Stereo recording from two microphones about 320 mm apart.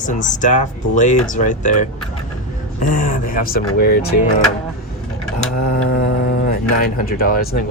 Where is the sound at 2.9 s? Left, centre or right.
Left.